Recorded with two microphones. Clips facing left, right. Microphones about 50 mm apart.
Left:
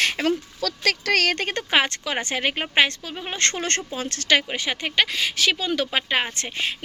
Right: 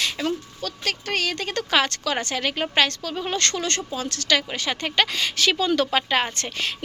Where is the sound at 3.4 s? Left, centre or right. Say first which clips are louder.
Left 1 dB; left.